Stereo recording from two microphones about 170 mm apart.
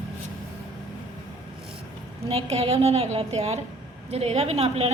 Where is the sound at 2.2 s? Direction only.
35° right (ahead or behind).